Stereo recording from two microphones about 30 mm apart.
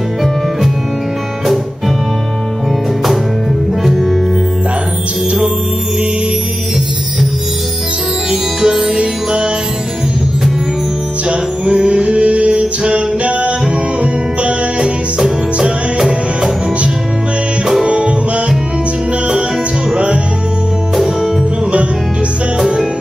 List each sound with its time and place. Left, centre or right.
3.8 s music: centre
8.3 s music: right
11.2 s music: right
17.8 s music: right